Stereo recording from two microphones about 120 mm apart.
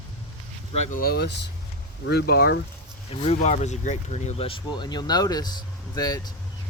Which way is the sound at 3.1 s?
65° left (ahead or behind).